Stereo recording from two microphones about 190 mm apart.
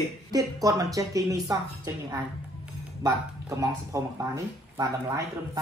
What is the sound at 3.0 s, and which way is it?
Speech, 15° right (ahead or behind).